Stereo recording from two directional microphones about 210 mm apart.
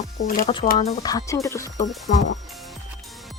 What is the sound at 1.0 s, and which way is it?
Speech, 15° left (ahead or behind).